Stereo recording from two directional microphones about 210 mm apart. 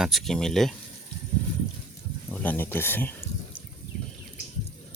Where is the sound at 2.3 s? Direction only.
10° left (ahead or behind).